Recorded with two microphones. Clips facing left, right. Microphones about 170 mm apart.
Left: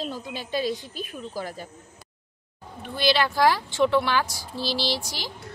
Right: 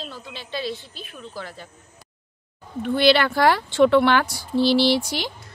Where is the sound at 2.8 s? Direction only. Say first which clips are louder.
Right 6 dB; 60° right (ahead or behind).